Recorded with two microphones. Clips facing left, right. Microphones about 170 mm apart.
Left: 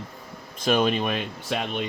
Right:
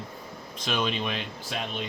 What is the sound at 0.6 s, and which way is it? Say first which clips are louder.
Speech: left 7 dB; 45° left (ahead or behind).